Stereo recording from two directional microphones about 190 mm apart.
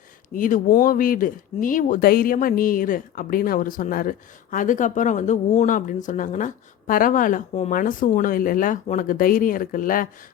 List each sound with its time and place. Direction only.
0.3 s speech: 45° left (ahead or behind)